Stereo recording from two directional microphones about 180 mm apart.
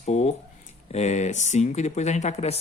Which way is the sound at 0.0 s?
40° left (ahead or behind).